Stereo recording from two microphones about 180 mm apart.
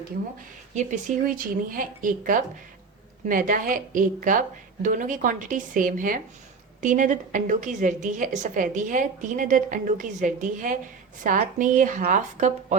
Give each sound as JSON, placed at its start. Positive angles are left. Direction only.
{"t": 0.7, "sound": "a woman's voice", "side_deg": -40}